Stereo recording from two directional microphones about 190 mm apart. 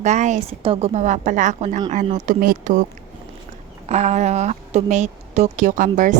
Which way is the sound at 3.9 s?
35° right (ahead or behind).